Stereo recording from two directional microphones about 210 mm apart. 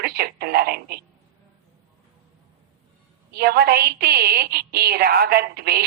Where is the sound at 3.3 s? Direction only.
50° right (ahead or behind).